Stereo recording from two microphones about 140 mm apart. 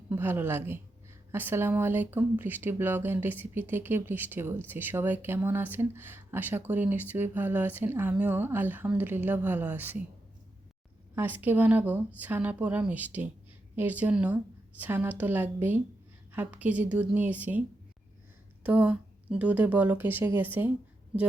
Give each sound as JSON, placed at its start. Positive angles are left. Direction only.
{"t": 0.1, "sound": "speech", "side_deg": -15}
{"t": 11.1, "sound": "speech", "side_deg": -15}
{"t": 18.6, "sound": "speech", "side_deg": -10}